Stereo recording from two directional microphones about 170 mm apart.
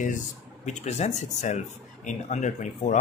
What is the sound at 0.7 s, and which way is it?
Speech, 40° left (ahead or behind).